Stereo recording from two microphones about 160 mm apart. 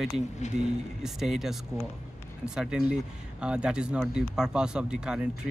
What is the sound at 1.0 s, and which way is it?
Speech, centre (ahead or behind).